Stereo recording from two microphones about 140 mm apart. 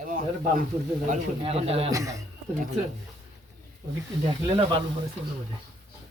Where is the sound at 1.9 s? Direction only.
25° right (ahead or behind).